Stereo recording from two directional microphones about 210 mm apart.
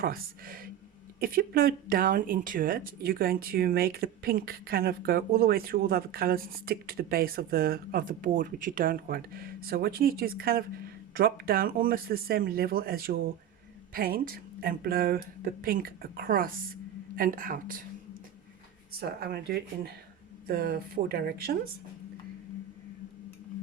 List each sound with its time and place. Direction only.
0.0 s a woman's voice: 45° right (ahead or behind)
18.9 s speech: 50° right (ahead or behind)